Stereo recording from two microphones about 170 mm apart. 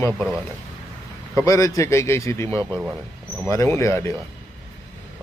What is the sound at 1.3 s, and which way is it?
Speech, 20° left (ahead or behind).